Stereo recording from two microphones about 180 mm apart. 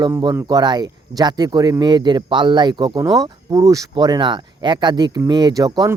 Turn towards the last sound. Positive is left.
turn(degrees=-20)  # may be behind; listen again after turning